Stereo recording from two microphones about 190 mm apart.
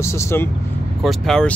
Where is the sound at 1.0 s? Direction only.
Centre (ahead or behind).